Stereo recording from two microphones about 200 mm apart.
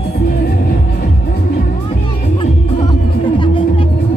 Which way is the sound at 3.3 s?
25° left (ahead or behind).